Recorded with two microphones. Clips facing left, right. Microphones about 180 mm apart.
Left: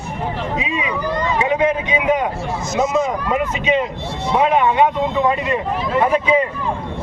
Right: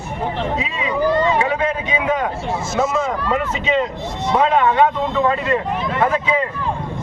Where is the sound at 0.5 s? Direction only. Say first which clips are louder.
Right 1 dB; 15° left (ahead or behind).